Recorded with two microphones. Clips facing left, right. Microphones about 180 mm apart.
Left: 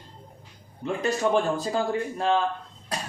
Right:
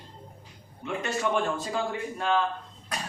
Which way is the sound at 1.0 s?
35° left (ahead or behind).